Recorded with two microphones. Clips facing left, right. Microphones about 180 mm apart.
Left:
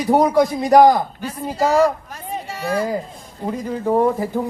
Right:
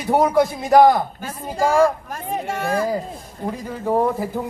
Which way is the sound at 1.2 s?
50° right (ahead or behind).